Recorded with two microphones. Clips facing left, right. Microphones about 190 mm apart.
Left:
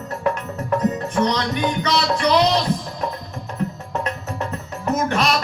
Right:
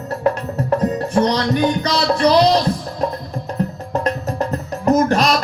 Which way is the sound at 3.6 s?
35° right (ahead or behind).